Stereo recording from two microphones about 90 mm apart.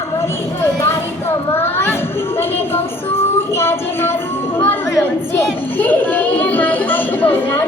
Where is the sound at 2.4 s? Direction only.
25° left (ahead or behind).